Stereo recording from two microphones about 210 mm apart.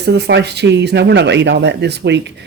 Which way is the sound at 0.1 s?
55° right (ahead or behind).